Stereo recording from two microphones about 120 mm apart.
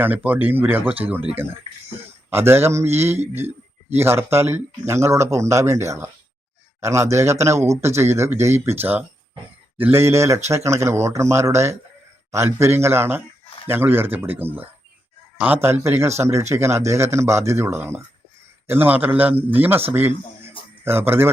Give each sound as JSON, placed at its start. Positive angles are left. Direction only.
{"t": 0.0, "sound": "a man's voice", "side_deg": -15}
{"t": 2.3, "sound": "a man's voice", "side_deg": -20}